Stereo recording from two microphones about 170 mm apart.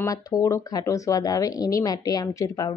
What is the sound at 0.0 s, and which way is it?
A woman's voice, 20° left (ahead or behind).